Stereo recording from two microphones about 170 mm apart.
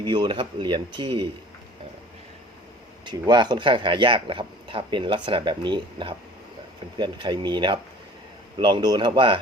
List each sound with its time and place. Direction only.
0.0 s speech: 25° right (ahead or behind)
3.1 s speech: 25° right (ahead or behind)